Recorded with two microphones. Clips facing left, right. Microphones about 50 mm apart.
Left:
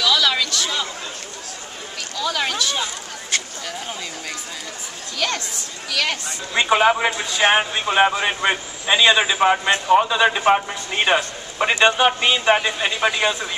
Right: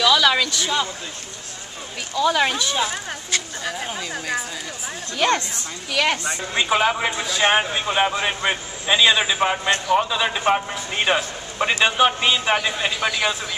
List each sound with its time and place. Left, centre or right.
0.0 s a sound: centre
2.1 s speech: centre
5.1 s a woman's voice: right
6.5 s a man's voice: centre